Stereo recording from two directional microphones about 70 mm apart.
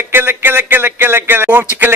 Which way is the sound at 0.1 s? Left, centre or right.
Right.